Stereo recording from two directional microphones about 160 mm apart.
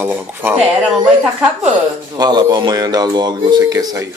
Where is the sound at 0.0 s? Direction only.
10° right (ahead or behind).